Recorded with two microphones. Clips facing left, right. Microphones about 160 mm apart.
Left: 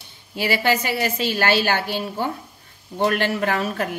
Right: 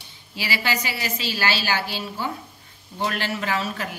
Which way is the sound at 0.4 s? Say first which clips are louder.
Left 6 dB; 50° left (ahead or behind).